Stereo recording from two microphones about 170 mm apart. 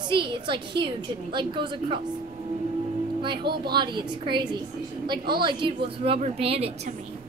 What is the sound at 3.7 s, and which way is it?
A woman's voice, 25° right (ahead or behind).